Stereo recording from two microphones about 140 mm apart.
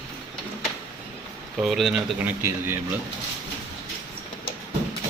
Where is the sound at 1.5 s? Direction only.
Centre (ahead or behind).